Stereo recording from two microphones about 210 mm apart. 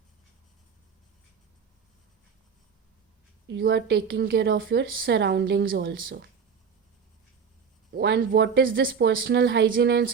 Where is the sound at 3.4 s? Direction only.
55° right (ahead or behind).